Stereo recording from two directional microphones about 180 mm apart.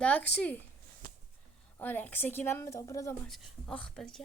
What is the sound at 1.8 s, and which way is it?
A woman's voice, 10° left (ahead or behind).